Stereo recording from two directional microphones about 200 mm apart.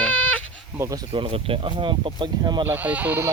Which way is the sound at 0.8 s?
20° right (ahead or behind).